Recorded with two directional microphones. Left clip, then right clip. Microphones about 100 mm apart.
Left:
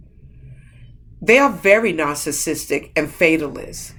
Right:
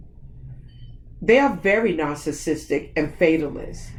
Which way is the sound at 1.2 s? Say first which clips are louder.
Left 4 dB; 20° left (ahead or behind).